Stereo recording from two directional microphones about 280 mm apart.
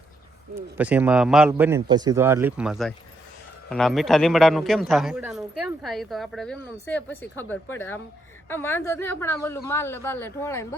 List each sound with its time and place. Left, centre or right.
0.5 s a man's voice: centre